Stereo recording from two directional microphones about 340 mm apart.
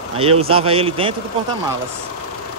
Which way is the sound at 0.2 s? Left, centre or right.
Centre.